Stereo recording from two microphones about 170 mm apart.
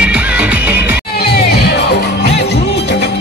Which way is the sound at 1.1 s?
70° left (ahead or behind).